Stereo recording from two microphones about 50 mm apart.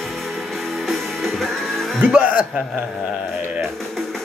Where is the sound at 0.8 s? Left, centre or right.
Centre.